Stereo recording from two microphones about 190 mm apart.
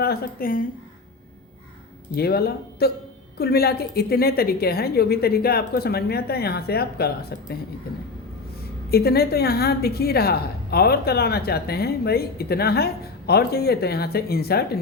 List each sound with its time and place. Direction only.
0.0 s a woman's voice: 50° left (ahead or behind)
2.1 s a woman's voice: 55° left (ahead or behind)
8.9 s a woman's voice: 55° left (ahead or behind)